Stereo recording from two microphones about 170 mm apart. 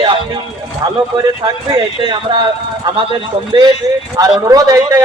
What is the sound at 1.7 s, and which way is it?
A man's voice, 30° right (ahead or behind).